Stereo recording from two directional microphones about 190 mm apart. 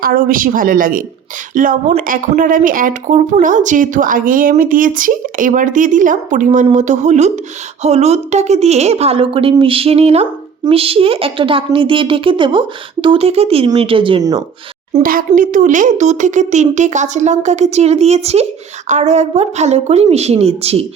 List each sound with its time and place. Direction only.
0.0 s a woman's voice: 50° right (ahead or behind); by 15.1 s 30° right (ahead or behind)
15.4 s speech: 40° right (ahead or behind)